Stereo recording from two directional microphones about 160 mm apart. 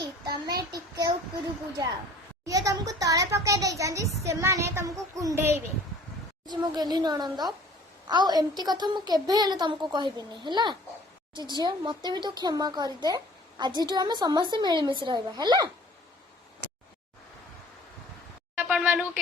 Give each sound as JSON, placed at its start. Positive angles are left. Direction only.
{"t": 0.0, "sound": "child singing", "side_deg": -25}
{"t": 2.4, "sound": "a child's voice", "side_deg": -20}
{"t": 6.5, "sound": "speech", "side_deg": -25}
{"t": 18.5, "sound": "speech", "side_deg": -10}